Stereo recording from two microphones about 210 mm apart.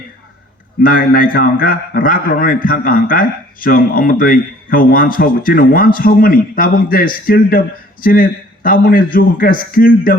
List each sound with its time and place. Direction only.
0.8 s a man's voice: 40° left (ahead or behind)